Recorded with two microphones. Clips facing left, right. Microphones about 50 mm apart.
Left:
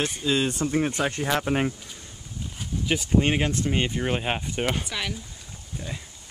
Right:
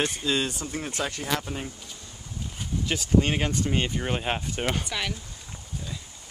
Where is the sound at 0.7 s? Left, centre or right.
Left.